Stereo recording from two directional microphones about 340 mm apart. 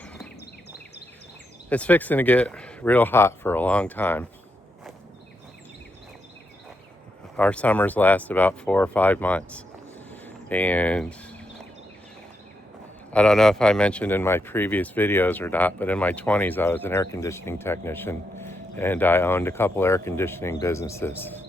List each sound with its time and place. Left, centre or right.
0.0 s a sound: centre
1.7 s speech: centre
7.3 s speech: centre
13.1 s speech: centre